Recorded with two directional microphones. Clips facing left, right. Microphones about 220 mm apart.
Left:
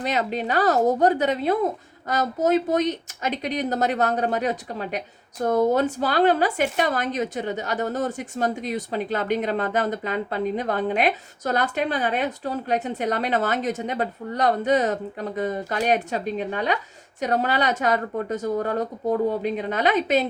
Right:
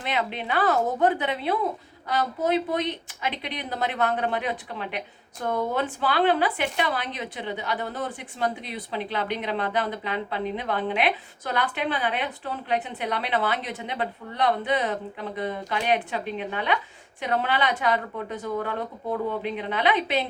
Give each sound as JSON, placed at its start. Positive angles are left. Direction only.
{"t": 0.0, "sound": "a woman's voice", "side_deg": 40}